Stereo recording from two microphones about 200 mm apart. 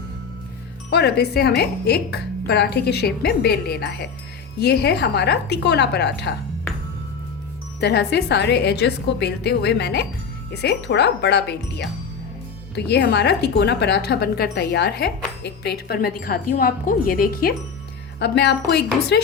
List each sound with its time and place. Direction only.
0.9 s a woman's voice: 55° left (ahead or behind)
7.8 s a woman's voice: 55° left (ahead or behind)
18.2 s a woman's voice: 60° left (ahead or behind)